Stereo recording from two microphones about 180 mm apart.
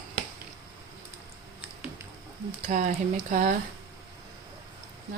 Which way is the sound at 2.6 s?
45° right (ahead or behind).